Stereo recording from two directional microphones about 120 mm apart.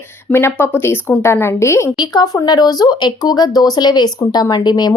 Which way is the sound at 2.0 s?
35° left (ahead or behind).